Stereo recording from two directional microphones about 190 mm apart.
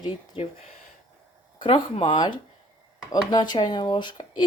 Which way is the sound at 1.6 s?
25° left (ahead or behind).